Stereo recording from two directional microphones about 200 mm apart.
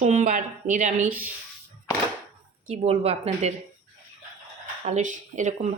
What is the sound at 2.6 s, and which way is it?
Speech, 30° right (ahead or behind).